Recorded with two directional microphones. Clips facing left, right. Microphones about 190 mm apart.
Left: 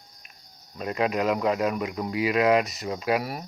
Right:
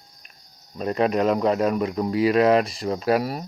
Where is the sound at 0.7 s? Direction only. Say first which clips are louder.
Right 4 dB; 35° right (ahead or behind).